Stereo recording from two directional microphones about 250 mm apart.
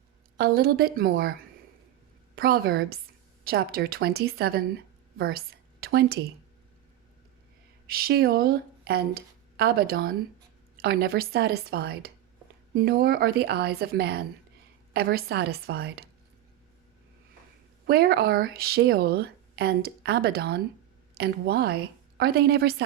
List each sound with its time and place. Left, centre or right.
0.3 s a woman's voice: right
7.9 s a woman's voice: right
17.8 s speech: right